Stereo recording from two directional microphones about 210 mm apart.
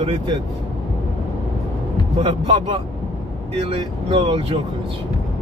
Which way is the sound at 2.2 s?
20° right (ahead or behind).